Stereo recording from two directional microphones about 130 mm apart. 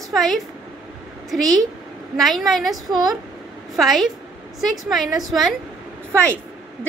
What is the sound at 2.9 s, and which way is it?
Speech, 30° right (ahead or behind).